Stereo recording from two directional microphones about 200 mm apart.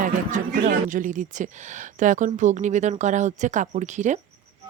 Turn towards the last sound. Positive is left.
turn(degrees=-35)  # may be behind; listen again after turning